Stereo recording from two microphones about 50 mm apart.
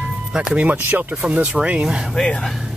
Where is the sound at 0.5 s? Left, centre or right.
Right.